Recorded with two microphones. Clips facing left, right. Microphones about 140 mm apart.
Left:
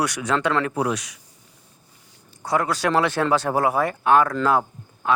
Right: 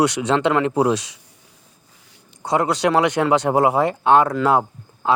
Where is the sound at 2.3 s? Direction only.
20° right (ahead or behind).